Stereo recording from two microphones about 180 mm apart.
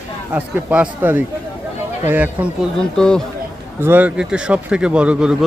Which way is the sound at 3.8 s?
10° right (ahead or behind).